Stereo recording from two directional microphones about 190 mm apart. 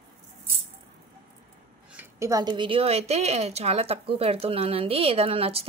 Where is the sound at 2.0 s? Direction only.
15° right (ahead or behind).